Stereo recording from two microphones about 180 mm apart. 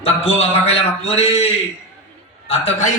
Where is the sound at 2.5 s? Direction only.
35° left (ahead or behind).